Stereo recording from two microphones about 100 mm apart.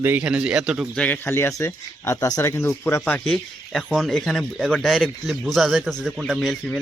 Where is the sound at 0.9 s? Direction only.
15° left (ahead or behind).